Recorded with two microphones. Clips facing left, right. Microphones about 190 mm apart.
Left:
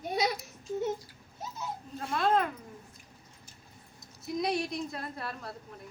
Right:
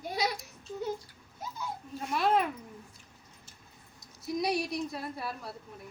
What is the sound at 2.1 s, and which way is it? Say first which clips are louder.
Speech: even; 5° right (ahead or behind).